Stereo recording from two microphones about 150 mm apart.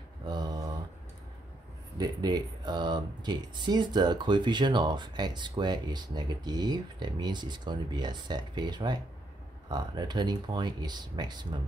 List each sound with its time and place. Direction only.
0.3 s mantra: 25° right (ahead or behind)
2.0 s speech: 30° right (ahead or behind)